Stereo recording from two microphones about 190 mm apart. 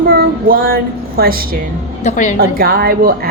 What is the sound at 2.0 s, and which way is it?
Speech, 40° left (ahead or behind).